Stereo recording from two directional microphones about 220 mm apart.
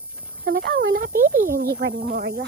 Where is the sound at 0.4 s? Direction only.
50° right (ahead or behind).